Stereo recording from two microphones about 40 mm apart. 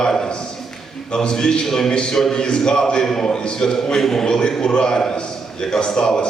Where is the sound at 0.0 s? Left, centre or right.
Centre.